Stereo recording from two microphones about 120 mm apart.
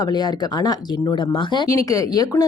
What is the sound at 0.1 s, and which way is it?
A woman's voice, 35° left (ahead or behind).